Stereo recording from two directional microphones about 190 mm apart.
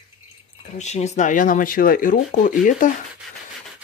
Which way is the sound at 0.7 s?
35° left (ahead or behind).